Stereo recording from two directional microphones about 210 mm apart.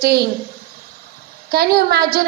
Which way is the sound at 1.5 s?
50° right (ahead or behind).